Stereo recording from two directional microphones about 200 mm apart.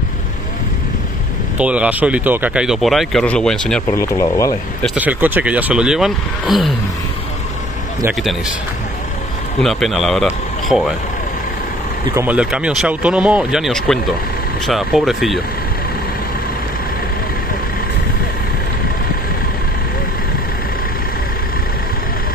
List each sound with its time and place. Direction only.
1.6 s speech: 5° right (ahead or behind)
3.9 s speech: 15° left (ahead or behind)
4.8 s speech: 10° right (ahead or behind)
8.1 s speech: centre (ahead or behind)
9.6 s speech: centre (ahead or behind)
12.2 s speech: 5° right (ahead or behind)